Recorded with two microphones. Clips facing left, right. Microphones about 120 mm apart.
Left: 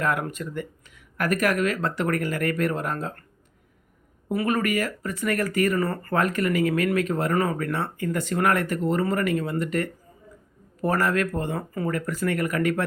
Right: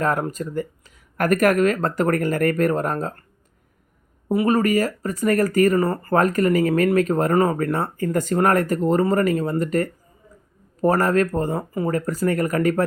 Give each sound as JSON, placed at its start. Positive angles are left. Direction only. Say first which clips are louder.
{"t": 0.0, "sound": "speech", "louder": "right 4 dB", "side_deg": -40}
{"t": 4.3, "sound": "speech", "louder": "right 6 dB", "side_deg": -35}